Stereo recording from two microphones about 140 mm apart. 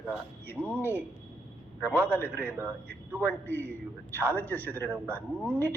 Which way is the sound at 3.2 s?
10° left (ahead or behind).